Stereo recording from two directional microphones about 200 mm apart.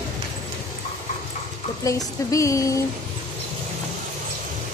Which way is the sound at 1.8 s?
15° left (ahead or behind).